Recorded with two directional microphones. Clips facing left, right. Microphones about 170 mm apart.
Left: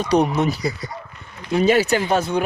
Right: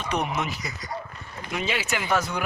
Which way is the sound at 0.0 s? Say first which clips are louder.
Left 10 dB; 35° left (ahead or behind).